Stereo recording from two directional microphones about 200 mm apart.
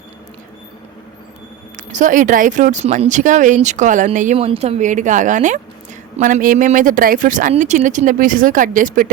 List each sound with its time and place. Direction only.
1.7 s speech: 40° right (ahead or behind)